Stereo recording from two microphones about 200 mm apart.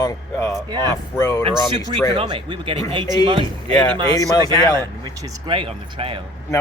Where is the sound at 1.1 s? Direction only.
15° left (ahead or behind).